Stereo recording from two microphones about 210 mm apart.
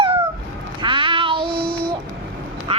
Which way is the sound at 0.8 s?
25° right (ahead or behind).